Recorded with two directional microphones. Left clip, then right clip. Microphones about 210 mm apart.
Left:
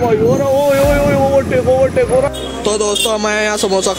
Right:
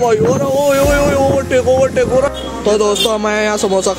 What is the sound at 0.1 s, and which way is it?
Vehicle, 40° right (ahead or behind).